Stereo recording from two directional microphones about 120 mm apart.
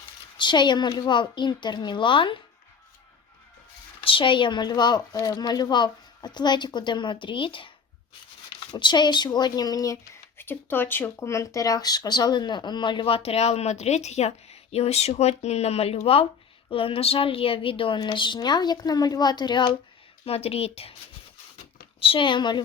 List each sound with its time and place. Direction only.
0.3 s speech: 40° left (ahead or behind)
4.0 s speech: 45° left (ahead or behind)
8.7 s speech: 40° left (ahead or behind)
20.2 s speech: 55° left (ahead or behind)
22.0 s a woman's voice: 45° left (ahead or behind)